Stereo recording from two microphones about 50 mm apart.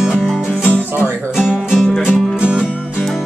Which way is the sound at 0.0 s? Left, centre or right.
Centre.